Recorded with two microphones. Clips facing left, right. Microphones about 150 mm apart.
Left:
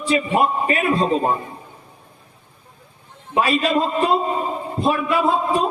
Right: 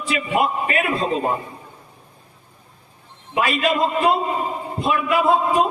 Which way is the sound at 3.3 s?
35° left (ahead or behind).